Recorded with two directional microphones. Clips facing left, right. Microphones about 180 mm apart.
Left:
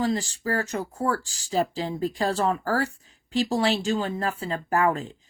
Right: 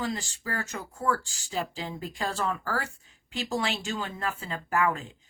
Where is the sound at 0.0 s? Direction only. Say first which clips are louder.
Left 7 dB; 40° left (ahead or behind).